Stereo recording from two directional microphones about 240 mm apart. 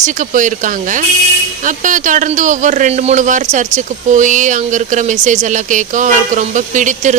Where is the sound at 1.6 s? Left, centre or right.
Right.